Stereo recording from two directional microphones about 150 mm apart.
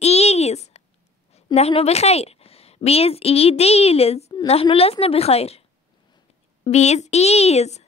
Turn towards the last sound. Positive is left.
turn(degrees=45)  # may be behind; listen again after turning